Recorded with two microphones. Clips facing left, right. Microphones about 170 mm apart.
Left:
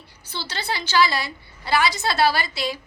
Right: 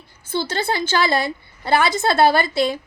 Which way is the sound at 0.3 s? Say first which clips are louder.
Right 8 dB; 50° right (ahead or behind).